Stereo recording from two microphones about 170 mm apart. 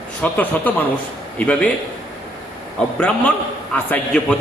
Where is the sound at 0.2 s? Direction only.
10° left (ahead or behind).